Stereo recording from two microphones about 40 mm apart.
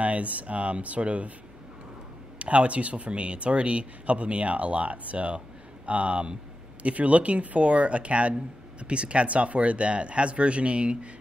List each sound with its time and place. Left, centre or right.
0.0 s speech: right
2.3 s speech: right